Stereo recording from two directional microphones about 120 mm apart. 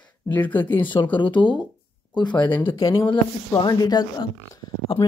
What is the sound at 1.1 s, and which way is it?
Speech, 40° left (ahead or behind).